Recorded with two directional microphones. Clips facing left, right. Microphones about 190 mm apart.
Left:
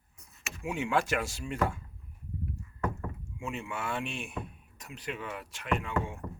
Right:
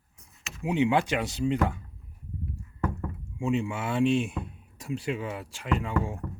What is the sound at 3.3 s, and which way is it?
Speech, 30° right (ahead or behind).